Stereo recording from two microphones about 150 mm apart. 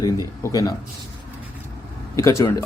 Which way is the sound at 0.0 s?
25° left (ahead or behind).